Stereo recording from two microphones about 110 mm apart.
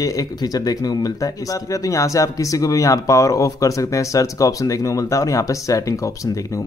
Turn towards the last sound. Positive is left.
turn(degrees=30)  # may be behind; listen again after turning